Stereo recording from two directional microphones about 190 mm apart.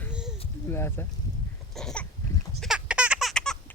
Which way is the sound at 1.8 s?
Centre (ahead or behind).